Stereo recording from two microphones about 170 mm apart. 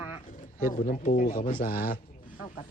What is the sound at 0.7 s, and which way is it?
Speech, 55° left (ahead or behind).